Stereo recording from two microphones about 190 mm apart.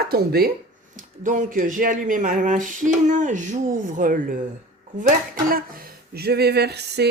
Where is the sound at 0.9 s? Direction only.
40° right (ahead or behind).